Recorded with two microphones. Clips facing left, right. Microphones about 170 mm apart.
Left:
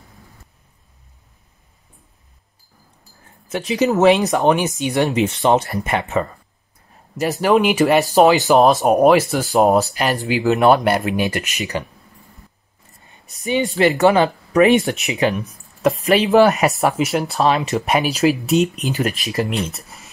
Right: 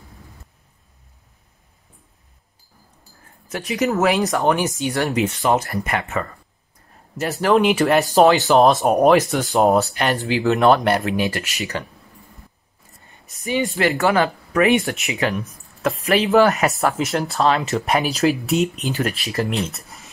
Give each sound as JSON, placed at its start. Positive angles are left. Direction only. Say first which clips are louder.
{"t": 3.4, "sound": "speech", "louder": "left 3 dB", "side_deg": 25}
{"t": 7.5, "sound": "speech", "louder": "left 1 dB", "side_deg": 0}
{"t": 8.3, "sound": "speech", "louder": "left 1 dB", "side_deg": 15}
{"t": 8.5, "sound": "speech", "louder": "left 1 dB", "side_deg": 0}
{"t": 10.1, "sound": "speech", "louder": "left 2 dB", "side_deg": 15}
{"t": 13.4, "sound": "speech", "louder": "left 3 dB", "side_deg": 20}
{"t": 17.9, "sound": "speech", "louder": "left 2 dB", "side_deg": 0}
{"t": 18.4, "sound": "speech", "louder": "left 3 dB", "side_deg": 20}